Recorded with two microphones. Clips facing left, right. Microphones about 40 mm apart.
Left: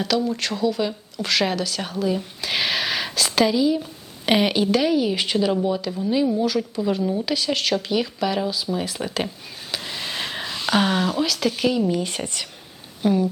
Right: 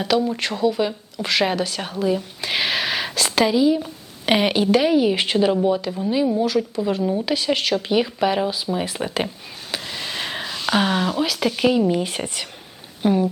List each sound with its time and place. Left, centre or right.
0.0 s speech: centre
9.8 s speech: centre